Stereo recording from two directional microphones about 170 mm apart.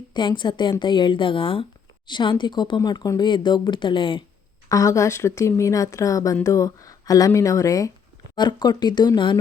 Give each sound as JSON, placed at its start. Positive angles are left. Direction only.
{"t": 0.1, "sound": "speech", "side_deg": 30}
{"t": 4.7, "sound": "speech", "side_deg": 20}